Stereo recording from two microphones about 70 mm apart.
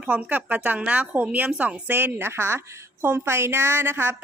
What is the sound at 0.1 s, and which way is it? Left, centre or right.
A woman's voice, right.